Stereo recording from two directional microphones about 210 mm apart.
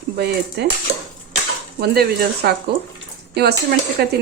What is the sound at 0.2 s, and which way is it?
Speech, 50° right (ahead or behind).